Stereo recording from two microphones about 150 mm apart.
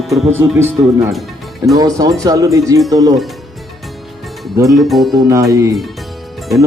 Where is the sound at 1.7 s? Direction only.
25° right (ahead or behind).